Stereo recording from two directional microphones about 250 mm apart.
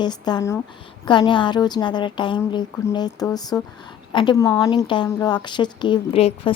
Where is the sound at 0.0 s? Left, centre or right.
Centre.